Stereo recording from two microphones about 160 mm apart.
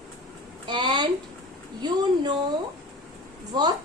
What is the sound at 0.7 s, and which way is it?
Speech, 30° right (ahead or behind).